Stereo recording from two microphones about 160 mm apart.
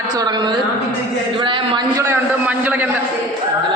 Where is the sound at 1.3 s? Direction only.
30° right (ahead or behind).